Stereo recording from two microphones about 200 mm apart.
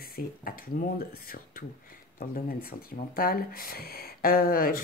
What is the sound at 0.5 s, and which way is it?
Speech, 45° left (ahead or behind).